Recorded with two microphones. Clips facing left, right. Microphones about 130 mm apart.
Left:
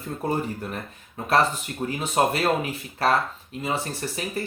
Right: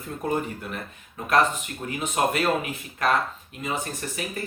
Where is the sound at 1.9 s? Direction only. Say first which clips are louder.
Left 2 dB; 30° left (ahead or behind).